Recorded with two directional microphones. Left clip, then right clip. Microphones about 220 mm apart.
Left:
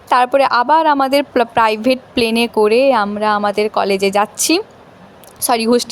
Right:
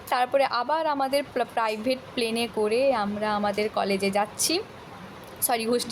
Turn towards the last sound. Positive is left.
turn(degrees=35)  # may be behind; listen again after turning